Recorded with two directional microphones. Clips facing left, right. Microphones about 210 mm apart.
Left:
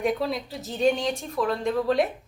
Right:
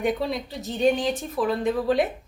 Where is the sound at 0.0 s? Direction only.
Centre (ahead or behind).